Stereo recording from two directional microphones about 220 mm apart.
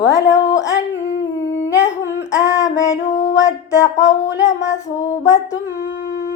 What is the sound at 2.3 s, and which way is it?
Female singing, 15° left (ahead or behind).